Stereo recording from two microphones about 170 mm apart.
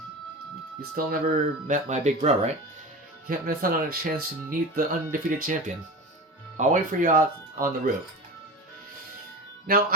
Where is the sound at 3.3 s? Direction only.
60° right (ahead or behind).